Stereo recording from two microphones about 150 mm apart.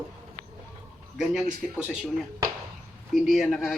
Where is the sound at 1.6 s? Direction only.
Centre (ahead or behind).